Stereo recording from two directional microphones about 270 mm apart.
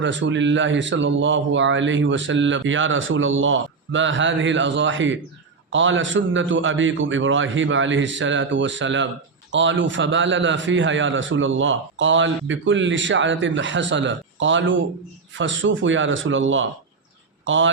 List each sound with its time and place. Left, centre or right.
0.0 s a man's voice: right